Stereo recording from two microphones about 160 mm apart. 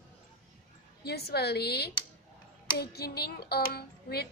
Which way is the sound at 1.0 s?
85° left.